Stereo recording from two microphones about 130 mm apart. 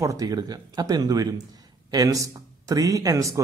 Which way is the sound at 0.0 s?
25° right (ahead or behind).